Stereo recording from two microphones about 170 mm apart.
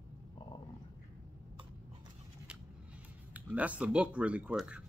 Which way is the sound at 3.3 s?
10° right (ahead or behind).